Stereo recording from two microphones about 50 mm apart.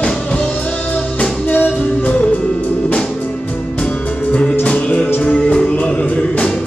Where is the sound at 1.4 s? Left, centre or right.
Left.